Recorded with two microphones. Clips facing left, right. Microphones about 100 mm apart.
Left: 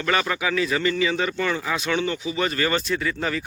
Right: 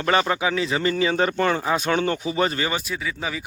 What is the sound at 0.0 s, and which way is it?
A man's voice, 30° right (ahead or behind).